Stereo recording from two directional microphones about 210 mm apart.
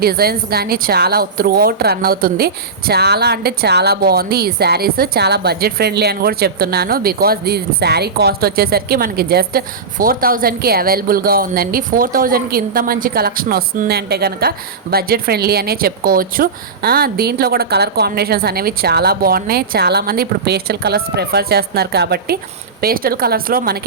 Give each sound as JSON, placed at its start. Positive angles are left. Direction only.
{"t": 0.0, "sound": "a woman's voice", "side_deg": -45}